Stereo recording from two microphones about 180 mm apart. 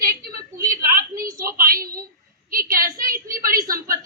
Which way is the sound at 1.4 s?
55° right (ahead or behind).